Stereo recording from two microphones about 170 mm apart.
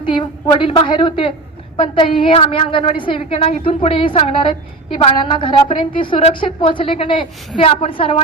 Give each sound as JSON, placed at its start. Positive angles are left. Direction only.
{"t": 0.0, "sound": "a woman's voice", "side_deg": 30}